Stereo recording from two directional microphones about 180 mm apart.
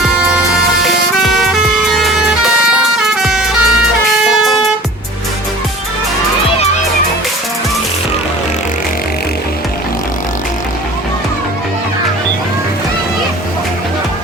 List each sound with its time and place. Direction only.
1.2 s vehicle: centre (ahead or behind)